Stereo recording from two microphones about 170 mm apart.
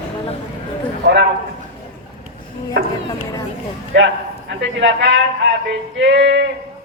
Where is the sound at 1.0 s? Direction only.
85° right.